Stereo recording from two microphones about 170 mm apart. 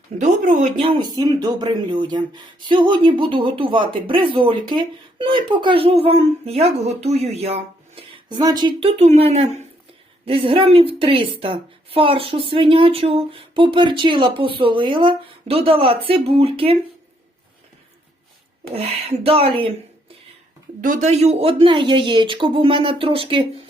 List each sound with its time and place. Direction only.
0.2 s speech: 45° right (ahead or behind)
0.8 s a woman's voice: 30° right (ahead or behind)
18.7 s a woman's voice: 35° right (ahead or behind)
20.8 s a woman's voice: 45° right (ahead or behind); by 23.5 s 30° right (ahead or behind)